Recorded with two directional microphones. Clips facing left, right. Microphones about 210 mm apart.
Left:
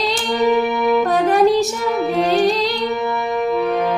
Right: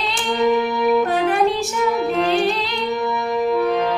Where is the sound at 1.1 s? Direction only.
40° left (ahead or behind).